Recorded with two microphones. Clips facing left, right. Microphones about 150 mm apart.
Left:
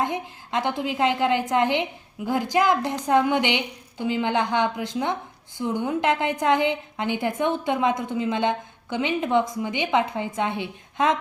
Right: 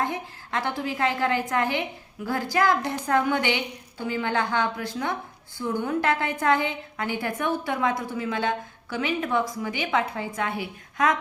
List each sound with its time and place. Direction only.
0.0 s a woman's voice: 20° left (ahead or behind)